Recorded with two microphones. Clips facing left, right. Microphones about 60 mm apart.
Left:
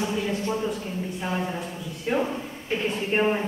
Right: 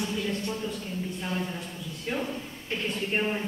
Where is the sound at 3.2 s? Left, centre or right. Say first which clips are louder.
Left 9 dB; centre.